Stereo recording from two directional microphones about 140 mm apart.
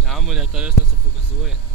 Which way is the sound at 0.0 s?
Centre (ahead or behind).